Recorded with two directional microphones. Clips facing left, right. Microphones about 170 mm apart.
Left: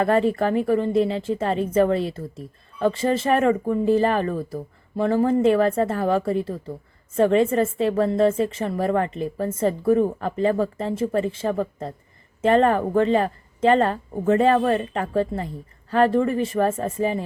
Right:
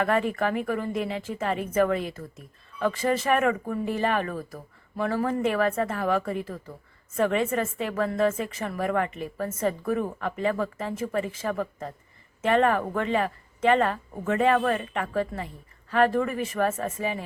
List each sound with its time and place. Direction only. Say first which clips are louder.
0.0 s a woman's voice: left 5 dB; 35° left (ahead or behind)